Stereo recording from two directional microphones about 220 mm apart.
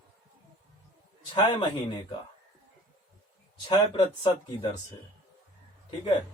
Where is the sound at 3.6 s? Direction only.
20° left (ahead or behind).